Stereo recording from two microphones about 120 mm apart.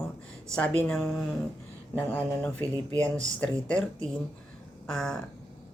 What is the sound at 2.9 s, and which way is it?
Speech, 25° right (ahead or behind).